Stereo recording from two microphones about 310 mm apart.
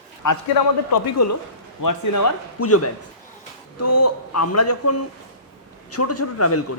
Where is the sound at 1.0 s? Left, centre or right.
Left.